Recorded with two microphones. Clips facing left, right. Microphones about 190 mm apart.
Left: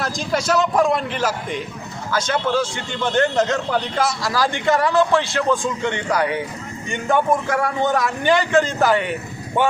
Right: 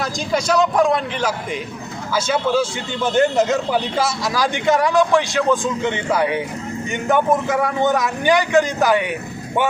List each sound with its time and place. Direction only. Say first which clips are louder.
0.0 s speech: right 1 dB; centre (ahead or behind)
2.1 s a man's voice: right 2 dB; 5° right (ahead or behind)
4.3 s a man's voice: right 2 dB; 15° right (ahead or behind)
7.3 s speech: right 2 dB; 5° right (ahead or behind)
7.9 s a man's voice: even; 20° right (ahead or behind)